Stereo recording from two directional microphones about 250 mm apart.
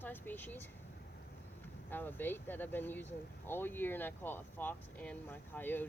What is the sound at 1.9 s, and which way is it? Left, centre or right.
Speech, centre.